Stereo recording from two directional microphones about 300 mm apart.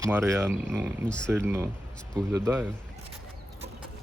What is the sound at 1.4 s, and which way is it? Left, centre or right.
Speech, centre.